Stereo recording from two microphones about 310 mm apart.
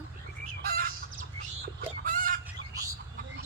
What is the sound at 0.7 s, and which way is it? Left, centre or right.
Chicken, right.